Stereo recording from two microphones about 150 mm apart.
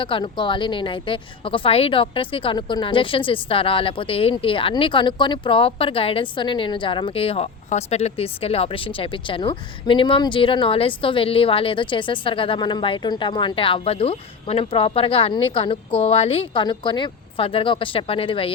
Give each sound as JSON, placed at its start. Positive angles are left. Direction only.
{"t": 0.0, "sound": "a woman's voice", "side_deg": 35}